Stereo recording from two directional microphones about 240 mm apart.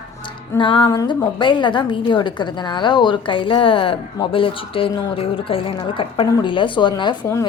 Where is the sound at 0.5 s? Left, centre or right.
Centre.